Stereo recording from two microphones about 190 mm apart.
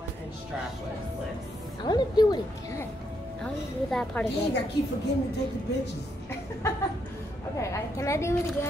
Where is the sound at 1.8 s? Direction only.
20° left (ahead or behind).